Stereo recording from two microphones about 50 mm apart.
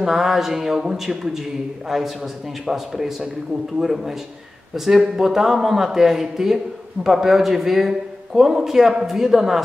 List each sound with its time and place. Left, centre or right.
0.0 s speech: centre